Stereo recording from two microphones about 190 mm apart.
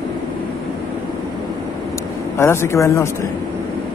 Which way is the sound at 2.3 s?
15° left (ahead or behind).